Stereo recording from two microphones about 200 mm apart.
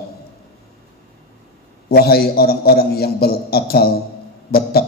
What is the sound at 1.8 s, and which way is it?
A man's voice, 50° left (ahead or behind).